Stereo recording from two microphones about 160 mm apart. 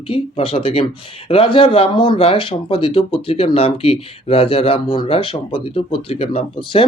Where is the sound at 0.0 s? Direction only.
35° left (ahead or behind).